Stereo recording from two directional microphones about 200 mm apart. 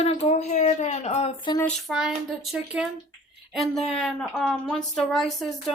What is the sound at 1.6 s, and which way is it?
A woman's voice, 5° left (ahead or behind).